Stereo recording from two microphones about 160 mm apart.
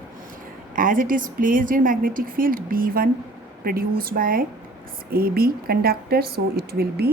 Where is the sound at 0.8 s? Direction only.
60° right (ahead or behind); by 7.1 s 75° right (ahead or behind).